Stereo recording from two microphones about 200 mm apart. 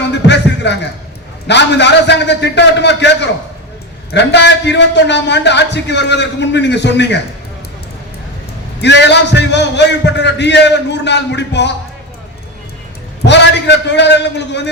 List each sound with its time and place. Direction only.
0.0 s music: 60° left (ahead or behind)
1.5 s a man's voice: 60° left (ahead or behind)
8.8 s a man's voice: 60° left (ahead or behind)
13.2 s a man's voice: 60° left (ahead or behind)